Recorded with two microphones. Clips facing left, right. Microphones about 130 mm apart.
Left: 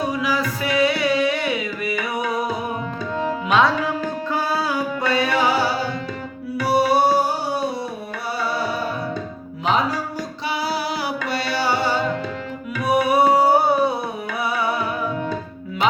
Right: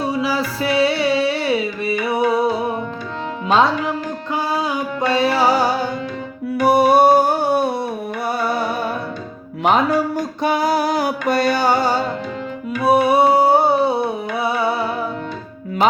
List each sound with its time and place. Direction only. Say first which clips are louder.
0.0 s music: right 2 dB; 30° right (ahead or behind)
3.5 s music: right 3 dB; 25° right (ahead or behind); by 5.7 s 40° right (ahead or behind)
6.6 s music: right 5 dB; 55° right (ahead or behind)
12.8 s music: right 3 dB; 30° right (ahead or behind)